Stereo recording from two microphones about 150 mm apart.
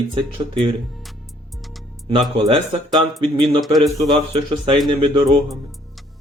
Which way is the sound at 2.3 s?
35° right (ahead or behind).